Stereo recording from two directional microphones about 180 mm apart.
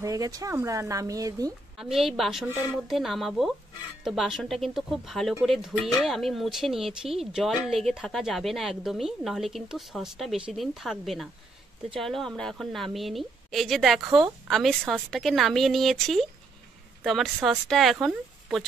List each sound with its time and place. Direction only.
0.0 s speech: 20° right (ahead or behind)
1.8 s speech: centre (ahead or behind)